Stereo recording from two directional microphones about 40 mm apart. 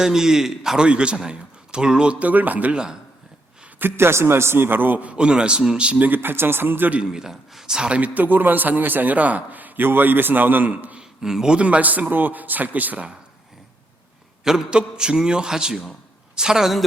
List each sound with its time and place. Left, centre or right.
0.0 s speech: centre
0.8 s a man's voice: right
2.1 s speech: right
3.8 s a man's voice: right
5.1 s a man's voice: right
6.0 s speech: right
7.0 s speech: centre
7.8 s a man's voice: right
8.0 s a man's voice: right
11.2 s speech: centre
11.5 s a man's voice: right
14.4 s a man's voice: centre